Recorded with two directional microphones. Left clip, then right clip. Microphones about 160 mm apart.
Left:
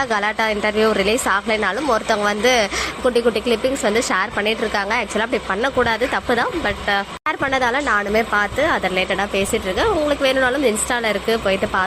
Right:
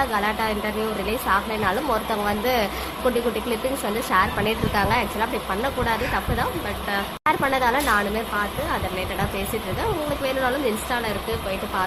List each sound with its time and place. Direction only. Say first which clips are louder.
0.0 s a woman's voice: left 4 dB; 35° left (ahead or behind)
4.1 s a woman's voice: left 2 dB; 30° left (ahead or behind)